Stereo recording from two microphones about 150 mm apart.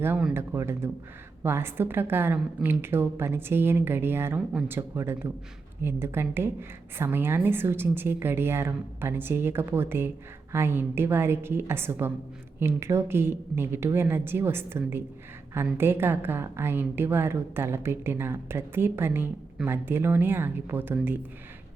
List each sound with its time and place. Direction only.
0.0 s a woman's voice: 10° right (ahead or behind)